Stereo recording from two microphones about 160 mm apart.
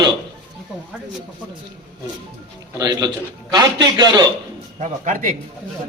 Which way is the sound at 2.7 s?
25° right (ahead or behind).